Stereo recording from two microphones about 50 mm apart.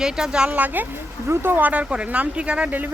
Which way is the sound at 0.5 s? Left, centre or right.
Right.